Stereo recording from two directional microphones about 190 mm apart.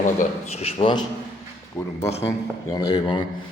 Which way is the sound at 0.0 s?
40° left (ahead or behind).